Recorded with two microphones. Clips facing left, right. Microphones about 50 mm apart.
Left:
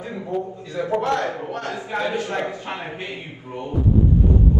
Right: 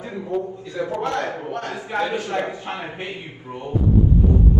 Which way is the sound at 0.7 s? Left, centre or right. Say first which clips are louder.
Left 3 dB; left.